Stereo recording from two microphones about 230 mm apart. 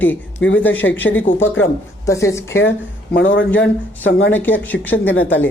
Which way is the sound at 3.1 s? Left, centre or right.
Left.